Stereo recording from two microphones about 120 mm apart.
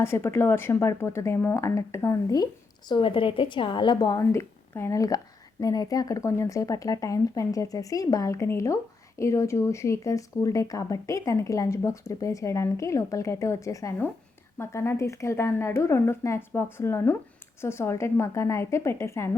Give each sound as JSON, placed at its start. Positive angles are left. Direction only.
{"t": 0.0, "sound": "a woman's voice", "side_deg": 20}
{"t": 2.9, "sound": "a woman's voice", "side_deg": 45}